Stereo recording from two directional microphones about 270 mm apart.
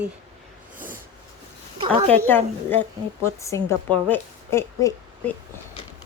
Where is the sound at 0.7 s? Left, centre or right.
Right.